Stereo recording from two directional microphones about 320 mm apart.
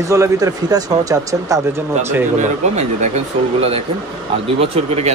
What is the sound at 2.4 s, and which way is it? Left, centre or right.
Speech, right.